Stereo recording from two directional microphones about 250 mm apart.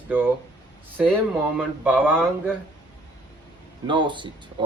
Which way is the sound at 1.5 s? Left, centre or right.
Centre.